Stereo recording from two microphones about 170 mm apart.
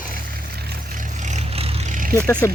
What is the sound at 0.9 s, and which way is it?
Vehicle, 45° right (ahead or behind).